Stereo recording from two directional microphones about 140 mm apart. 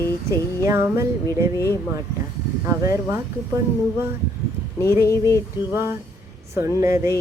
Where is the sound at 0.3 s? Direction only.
20° right (ahead or behind).